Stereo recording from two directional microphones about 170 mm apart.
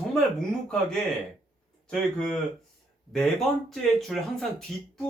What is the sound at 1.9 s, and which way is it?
Speech, 5° left (ahead or behind).